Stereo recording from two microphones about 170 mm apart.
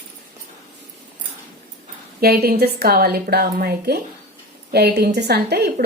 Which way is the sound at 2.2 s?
65° right (ahead or behind).